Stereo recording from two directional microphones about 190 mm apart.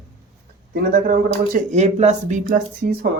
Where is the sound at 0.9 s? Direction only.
50° right (ahead or behind).